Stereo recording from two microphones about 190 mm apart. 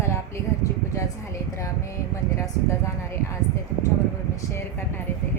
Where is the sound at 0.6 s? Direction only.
15° left (ahead or behind).